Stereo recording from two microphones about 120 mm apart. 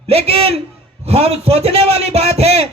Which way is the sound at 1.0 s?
60° right (ahead or behind).